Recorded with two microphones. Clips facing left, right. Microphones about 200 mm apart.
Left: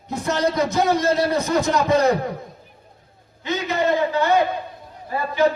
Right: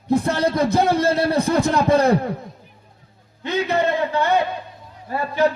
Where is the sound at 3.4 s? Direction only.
60° right (ahead or behind).